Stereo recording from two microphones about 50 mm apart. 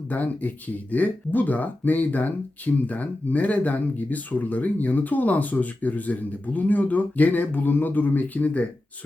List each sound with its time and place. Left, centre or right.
0.1 s speech: left